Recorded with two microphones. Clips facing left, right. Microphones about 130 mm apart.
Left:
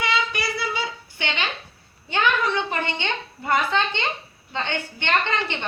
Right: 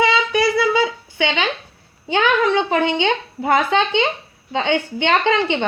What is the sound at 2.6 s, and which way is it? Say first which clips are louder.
A woman's voice: right 9 dB; 90° right.